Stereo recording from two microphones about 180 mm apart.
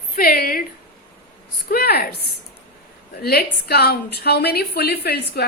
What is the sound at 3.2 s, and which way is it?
A woman's voice, 60° left (ahead or behind).